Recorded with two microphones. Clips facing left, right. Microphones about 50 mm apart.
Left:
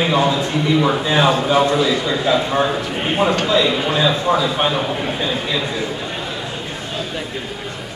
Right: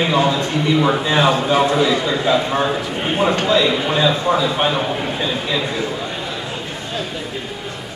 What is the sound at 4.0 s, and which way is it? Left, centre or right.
A man's voice, centre.